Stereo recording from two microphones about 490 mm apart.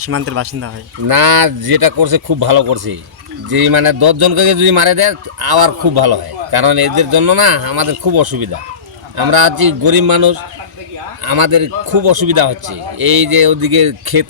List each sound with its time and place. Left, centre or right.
0.0 s speech: right
1.0 s a man's voice: right